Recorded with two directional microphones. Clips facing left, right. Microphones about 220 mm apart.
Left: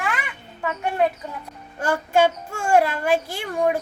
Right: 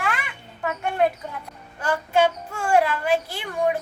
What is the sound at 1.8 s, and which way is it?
A woman's voice, 45° left (ahead or behind).